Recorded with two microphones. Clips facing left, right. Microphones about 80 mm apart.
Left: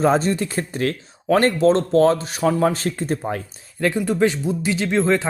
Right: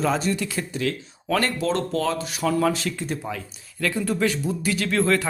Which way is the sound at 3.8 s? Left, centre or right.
Left.